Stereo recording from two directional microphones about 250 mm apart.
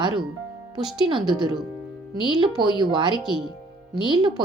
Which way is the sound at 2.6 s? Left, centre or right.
Centre.